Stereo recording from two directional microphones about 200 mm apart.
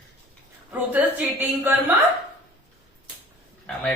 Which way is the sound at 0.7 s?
10° right (ahead or behind).